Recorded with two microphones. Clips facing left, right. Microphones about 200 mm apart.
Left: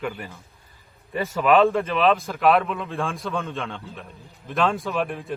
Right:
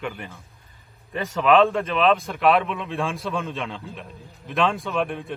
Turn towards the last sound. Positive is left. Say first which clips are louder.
# right 1 dB
turn(degrees=0)  # may be behind; listen again after turning